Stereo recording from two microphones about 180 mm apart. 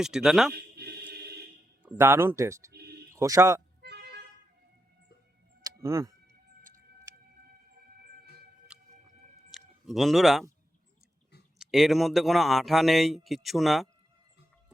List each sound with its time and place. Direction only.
0.0 s speech: 5° right (ahead or behind)
0.5 s music: 60° right (ahead or behind)
2.0 s speech: 15° right (ahead or behind)
2.7 s a sound: 60° right (ahead or behind)
3.1 s a man's voice: 15° right (ahead or behind)
3.8 s vehicle: 65° right (ahead or behind)
5.8 s speech: 15° right (ahead or behind)
7.4 s siren: 55° right (ahead or behind)
8.7 s chewing: 5° right (ahead or behind)
9.5 s a sound: centre (ahead or behind)
11.6 s speech: centre (ahead or behind)